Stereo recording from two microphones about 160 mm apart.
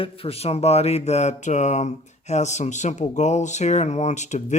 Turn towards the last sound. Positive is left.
turn(degrees=45)  # may be behind; listen again after turning